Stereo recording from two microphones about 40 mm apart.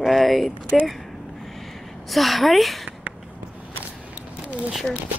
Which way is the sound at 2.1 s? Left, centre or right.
Centre.